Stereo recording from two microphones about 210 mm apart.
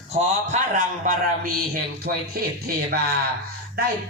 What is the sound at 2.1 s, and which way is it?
Music, 45° right (ahead or behind).